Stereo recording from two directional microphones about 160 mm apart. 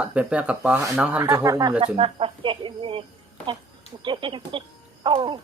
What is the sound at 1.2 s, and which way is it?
Speech, 20° right (ahead or behind).